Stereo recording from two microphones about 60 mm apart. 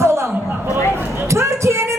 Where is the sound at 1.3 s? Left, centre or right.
Right.